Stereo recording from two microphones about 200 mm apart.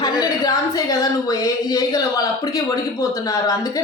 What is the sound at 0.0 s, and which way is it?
A woman's voice, 20° left (ahead or behind).